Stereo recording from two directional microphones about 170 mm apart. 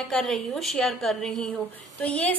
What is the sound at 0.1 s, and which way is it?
A woman's voice, centre (ahead or behind).